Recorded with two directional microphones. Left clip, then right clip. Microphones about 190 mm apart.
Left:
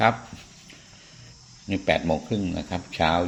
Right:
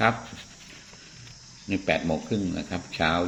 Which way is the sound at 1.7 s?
30° left (ahead or behind).